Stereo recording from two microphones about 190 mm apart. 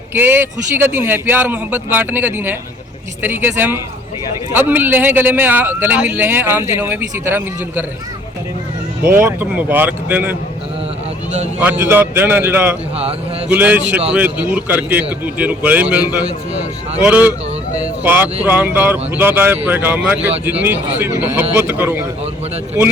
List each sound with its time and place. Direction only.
0.1 s a man's voice: 10° right (ahead or behind)
9.0 s a man's voice: 15° right (ahead or behind)
11.6 s a man's voice: 10° right (ahead or behind)
16.2 s speech: 35° right (ahead or behind)
17.0 s a man's voice: 10° right (ahead or behind)